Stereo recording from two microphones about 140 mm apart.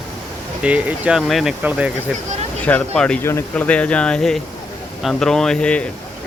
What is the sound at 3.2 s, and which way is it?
Speech, 20° left (ahead or behind).